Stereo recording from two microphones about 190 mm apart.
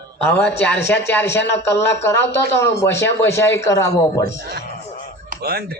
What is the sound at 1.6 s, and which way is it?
A man's voice, 15° left (ahead or behind).